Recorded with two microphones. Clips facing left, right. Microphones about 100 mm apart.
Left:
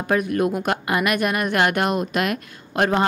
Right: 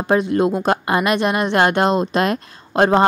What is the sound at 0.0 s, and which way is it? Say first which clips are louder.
A woman's voice: right 4 dB; 25° right (ahead or behind).